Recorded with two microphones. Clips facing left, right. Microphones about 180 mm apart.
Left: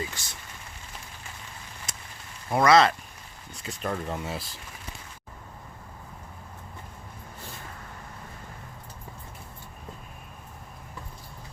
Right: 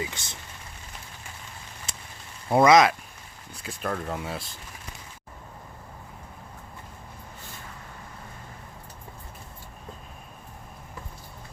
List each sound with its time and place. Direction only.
0.0 s speech: 20° right (ahead or behind)
2.5 s speech: 20° right (ahead or behind)
3.5 s speech: centre (ahead or behind)